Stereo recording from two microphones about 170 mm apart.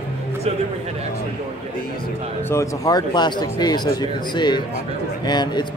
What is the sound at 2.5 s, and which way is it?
Speech, 20° left (ahead or behind).